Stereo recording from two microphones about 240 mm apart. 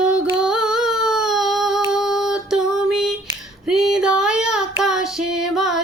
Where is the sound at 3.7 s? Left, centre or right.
Centre.